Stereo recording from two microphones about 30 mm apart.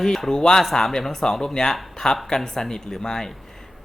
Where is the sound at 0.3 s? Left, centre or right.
Left.